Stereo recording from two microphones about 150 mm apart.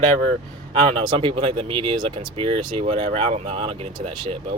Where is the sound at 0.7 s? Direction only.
40° right (ahead or behind).